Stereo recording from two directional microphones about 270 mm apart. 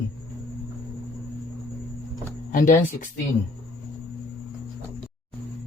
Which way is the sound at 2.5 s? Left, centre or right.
Left.